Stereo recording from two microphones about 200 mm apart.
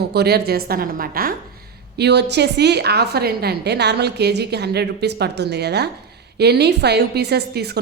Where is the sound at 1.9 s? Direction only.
55° right (ahead or behind).